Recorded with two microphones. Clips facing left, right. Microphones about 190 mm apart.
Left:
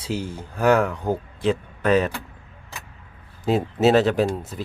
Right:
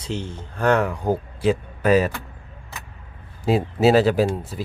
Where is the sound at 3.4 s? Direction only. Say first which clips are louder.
Right 1 dB; 5° right (ahead or behind).